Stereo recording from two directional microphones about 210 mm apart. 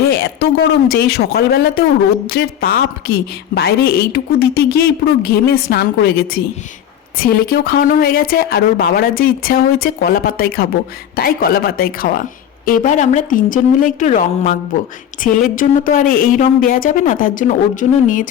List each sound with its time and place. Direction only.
0.1 s speech: 55° left (ahead or behind)